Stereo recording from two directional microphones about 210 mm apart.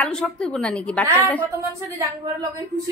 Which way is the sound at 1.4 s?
15° right (ahead or behind).